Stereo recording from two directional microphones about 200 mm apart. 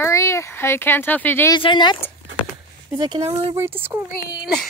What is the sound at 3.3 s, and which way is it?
Speech, 30° right (ahead or behind).